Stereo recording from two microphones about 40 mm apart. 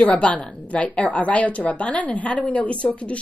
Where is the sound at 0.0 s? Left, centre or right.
Left.